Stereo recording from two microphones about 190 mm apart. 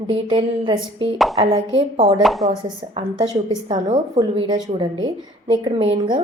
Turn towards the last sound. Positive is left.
turn(degrees=-25)  # may be behind; listen again after turning